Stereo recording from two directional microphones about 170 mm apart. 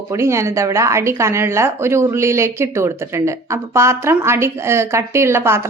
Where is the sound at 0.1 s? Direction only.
15° right (ahead or behind).